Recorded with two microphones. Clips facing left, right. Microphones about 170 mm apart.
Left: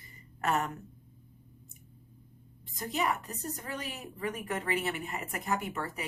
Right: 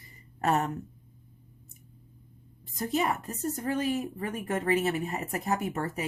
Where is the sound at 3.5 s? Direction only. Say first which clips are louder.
Right 11 dB; 45° right (ahead or behind).